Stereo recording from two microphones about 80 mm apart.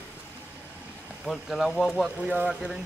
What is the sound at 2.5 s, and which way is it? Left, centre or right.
Speech, centre.